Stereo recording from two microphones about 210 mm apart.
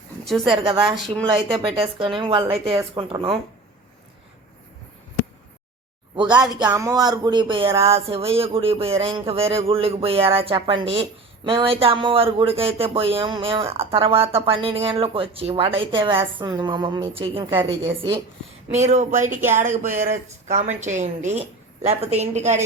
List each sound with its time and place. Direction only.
0.3 s speech: centre (ahead or behind)
0.5 s speech: 20° right (ahead or behind)
0.9 s speech: centre (ahead or behind)
1.4 s speech: 25° right (ahead or behind)
6.4 s speech: 20° right (ahead or behind)
18.7 s a woman's voice: 35° right (ahead or behind)